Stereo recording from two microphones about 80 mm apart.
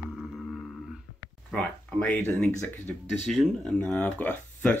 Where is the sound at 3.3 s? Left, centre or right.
Centre.